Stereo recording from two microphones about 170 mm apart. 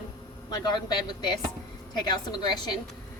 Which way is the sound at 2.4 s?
25° left (ahead or behind).